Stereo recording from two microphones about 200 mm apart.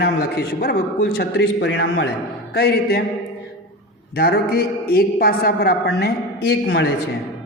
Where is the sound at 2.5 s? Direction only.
55° left (ahead or behind).